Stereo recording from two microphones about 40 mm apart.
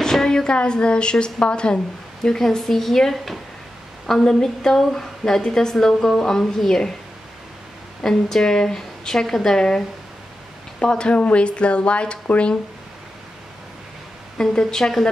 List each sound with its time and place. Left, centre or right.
0.0 s a woman's voice: centre
2.2 s a woman's voice: centre
8.0 s a woman's voice: centre; by 12.5 s left
14.4 s a woman's voice: centre